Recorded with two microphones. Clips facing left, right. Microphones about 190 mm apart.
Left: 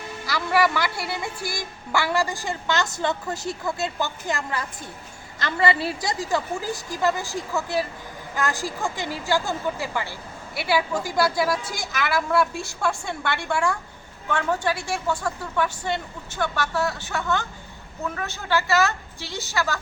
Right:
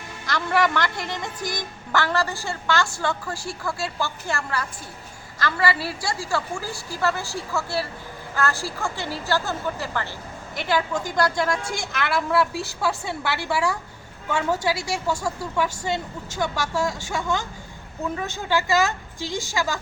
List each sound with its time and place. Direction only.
0.3 s a woman's voice: 5° left (ahead or behind); by 19.8 s 15° right (ahead or behind)